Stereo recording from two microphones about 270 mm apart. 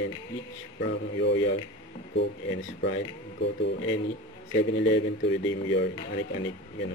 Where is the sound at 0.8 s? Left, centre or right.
Left.